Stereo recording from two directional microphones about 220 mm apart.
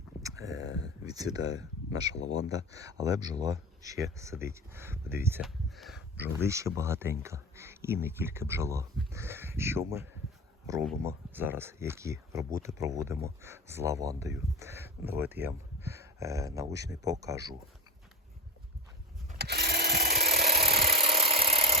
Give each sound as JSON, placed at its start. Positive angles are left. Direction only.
{"t": 0.2, "sound": "a sound", "side_deg": -15}
{"t": 1.0, "sound": "speech", "side_deg": -15}
{"t": 19.4, "sound": "sewing machine", "side_deg": -45}
{"t": 20.9, "sound": "engine", "side_deg": -25}